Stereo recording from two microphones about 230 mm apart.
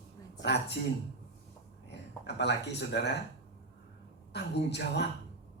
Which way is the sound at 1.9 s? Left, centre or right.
Left.